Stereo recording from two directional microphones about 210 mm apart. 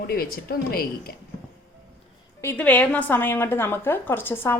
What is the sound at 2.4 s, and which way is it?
A woman's voice, 10° left (ahead or behind).